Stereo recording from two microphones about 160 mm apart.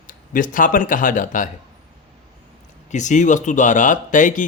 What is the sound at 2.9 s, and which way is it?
Speech, 50° left (ahead or behind).